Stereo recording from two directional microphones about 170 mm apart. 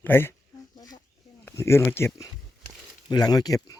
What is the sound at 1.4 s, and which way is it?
Speech, 15° left (ahead or behind).